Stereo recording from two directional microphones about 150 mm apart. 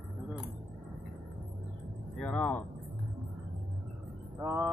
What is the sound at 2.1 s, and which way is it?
Speech, 10° left (ahead or behind).